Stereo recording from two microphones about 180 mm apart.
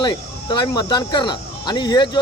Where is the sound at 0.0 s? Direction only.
25° left (ahead or behind).